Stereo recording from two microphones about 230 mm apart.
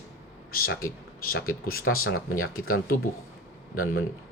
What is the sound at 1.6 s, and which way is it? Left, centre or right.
A man's voice, left.